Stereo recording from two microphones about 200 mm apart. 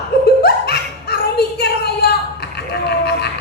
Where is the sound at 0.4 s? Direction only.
55° left (ahead or behind).